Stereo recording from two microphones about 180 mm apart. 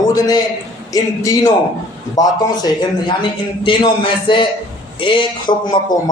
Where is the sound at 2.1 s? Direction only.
20° left (ahead or behind).